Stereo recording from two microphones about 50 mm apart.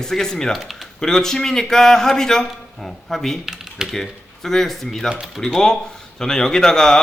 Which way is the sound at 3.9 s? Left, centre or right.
Centre.